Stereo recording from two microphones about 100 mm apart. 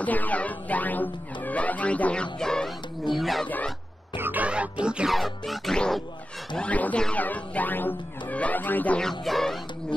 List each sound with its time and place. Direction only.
0.0 s speech: 15° left (ahead or behind); by 3.4 s centre (ahead or behind)
4.2 s music: 15° right (ahead or behind); by 6.0 s 5° left (ahead or behind)
6.5 s speech: 10° left (ahead or behind)
9.2 s music: centre (ahead or behind)